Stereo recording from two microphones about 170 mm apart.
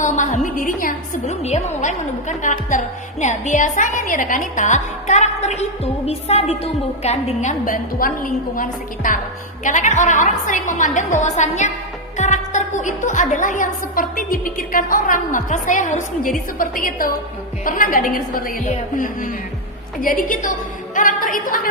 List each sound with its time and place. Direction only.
0.0 s a woman's voice: 45° left (ahead or behind)